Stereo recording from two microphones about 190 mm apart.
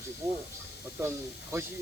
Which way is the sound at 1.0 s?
10° right (ahead or behind).